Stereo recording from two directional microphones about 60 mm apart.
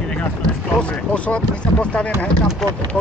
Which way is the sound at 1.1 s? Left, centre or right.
Centre.